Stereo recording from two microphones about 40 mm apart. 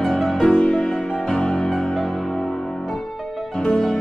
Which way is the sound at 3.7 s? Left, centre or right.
Centre.